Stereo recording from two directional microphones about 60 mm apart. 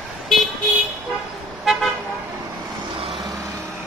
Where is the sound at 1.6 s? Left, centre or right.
Centre.